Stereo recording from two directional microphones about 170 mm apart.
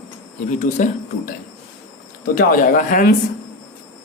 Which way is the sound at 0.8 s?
45° left (ahead or behind).